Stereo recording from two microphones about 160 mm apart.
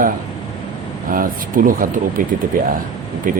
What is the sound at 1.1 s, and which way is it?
Speech, 60° right (ahead or behind).